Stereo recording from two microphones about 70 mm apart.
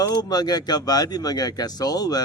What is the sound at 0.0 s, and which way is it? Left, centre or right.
Speech, left.